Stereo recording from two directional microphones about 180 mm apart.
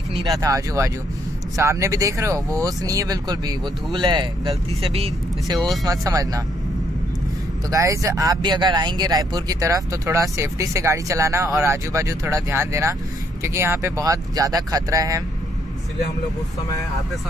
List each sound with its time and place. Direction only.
0.1 s speech: 20° right (ahead or behind)
5.9 s speech: 20° right (ahead or behind)
7.7 s speech: 15° right (ahead or behind)